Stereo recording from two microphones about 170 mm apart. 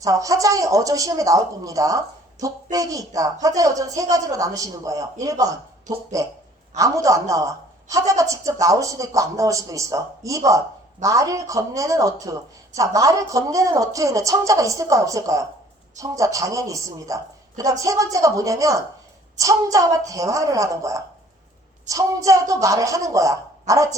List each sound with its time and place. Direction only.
0.0 s a woman's voice: 20° right (ahead or behind)